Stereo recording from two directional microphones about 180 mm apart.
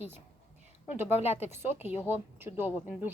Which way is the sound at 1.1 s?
35° left (ahead or behind).